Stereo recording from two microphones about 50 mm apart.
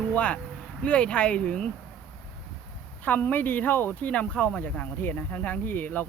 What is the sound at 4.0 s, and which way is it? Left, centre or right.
Speech, left.